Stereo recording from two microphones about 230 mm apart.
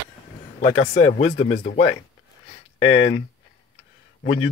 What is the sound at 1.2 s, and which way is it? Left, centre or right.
Speech, left.